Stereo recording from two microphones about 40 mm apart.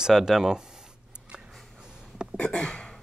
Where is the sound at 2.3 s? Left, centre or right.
Left.